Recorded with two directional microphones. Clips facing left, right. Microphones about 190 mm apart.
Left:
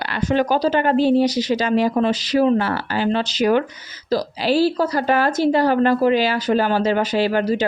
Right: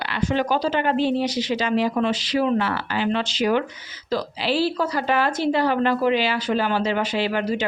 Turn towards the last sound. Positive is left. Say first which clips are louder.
# left 5 dB
turn(degrees=40)  # may be behind; listen again after turning